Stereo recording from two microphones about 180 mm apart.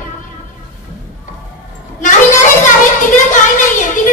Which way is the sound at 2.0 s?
45° left (ahead or behind).